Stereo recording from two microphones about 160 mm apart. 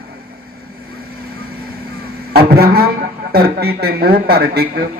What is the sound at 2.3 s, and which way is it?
Music, 75° right (ahead or behind).